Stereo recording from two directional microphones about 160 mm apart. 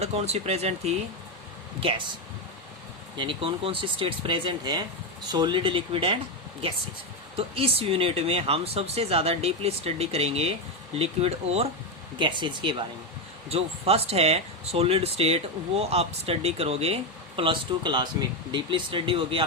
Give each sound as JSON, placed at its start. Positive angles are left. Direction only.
{"t": 0.0, "sound": "speech", "side_deg": -40}
{"t": 3.2, "sound": "speech", "side_deg": -35}
{"t": 7.3, "sound": "speech", "side_deg": -35}
{"t": 12.1, "sound": "speech", "side_deg": -30}